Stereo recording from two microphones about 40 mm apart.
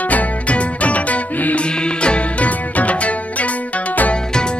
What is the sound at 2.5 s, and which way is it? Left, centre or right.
Music, left.